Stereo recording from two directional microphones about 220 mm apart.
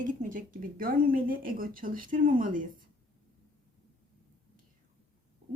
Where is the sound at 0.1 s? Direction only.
35° right (ahead or behind).